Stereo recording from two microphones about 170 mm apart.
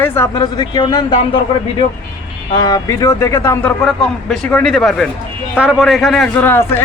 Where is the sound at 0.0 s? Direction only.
15° left (ahead or behind).